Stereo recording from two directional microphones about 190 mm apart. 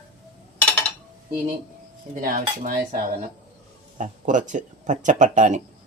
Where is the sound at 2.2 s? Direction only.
45° right (ahead or behind).